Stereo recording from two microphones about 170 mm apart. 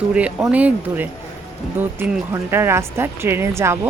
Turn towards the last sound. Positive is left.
turn(degrees=-15)  # may be behind; listen again after turning